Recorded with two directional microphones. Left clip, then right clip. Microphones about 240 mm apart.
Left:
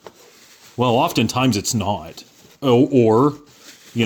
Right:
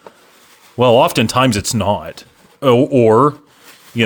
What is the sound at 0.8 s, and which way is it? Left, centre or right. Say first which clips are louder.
Speech: right 7 dB; right.